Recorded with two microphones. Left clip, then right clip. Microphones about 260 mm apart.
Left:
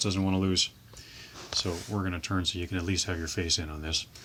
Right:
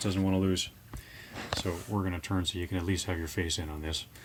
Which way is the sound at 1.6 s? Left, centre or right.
Centre.